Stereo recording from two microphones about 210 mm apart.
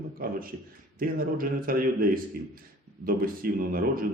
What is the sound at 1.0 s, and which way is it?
A man's voice, 45° right (ahead or behind).